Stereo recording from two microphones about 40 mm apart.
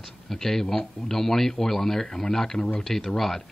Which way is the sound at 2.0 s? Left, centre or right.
Left.